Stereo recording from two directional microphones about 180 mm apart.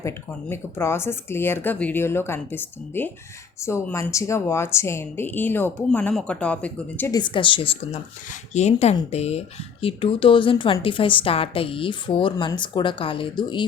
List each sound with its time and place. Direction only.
0.0 s a woman's voice: 15° left (ahead or behind)
7.1 s speech: 25° left (ahead or behind)